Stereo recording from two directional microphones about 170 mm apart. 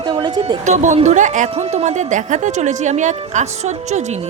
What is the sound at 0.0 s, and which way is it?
Speech, 30° right (ahead or behind).